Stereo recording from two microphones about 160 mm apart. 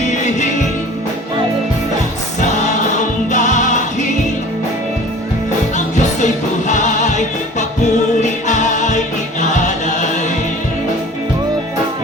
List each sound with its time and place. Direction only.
0.1 s music: 50° left (ahead or behind)
3.3 s music: 50° left (ahead or behind)
5.7 s music: 50° left (ahead or behind)